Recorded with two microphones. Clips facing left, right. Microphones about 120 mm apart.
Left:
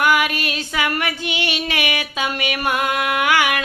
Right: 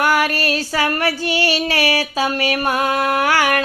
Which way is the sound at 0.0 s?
40° right (ahead or behind).